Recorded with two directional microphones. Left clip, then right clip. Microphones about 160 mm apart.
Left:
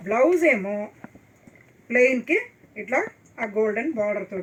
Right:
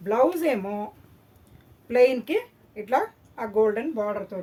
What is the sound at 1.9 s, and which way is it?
A woman's voice, 45° right (ahead or behind).